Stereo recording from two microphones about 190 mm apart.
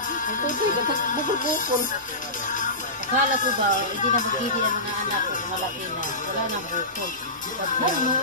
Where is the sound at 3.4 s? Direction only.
40° left (ahead or behind).